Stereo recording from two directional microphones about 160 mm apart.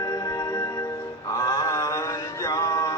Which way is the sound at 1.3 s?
20° left (ahead or behind).